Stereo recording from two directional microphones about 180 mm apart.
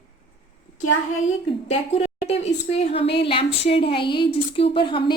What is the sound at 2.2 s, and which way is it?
A woman's voice, 35° left (ahead or behind).